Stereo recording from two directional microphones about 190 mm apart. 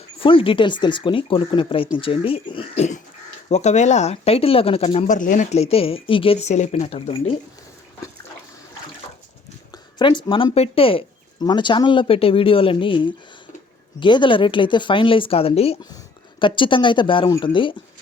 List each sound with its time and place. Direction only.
0.2 s speech: 30° left (ahead or behind)
9.7 s speech: 25° left (ahead or behind)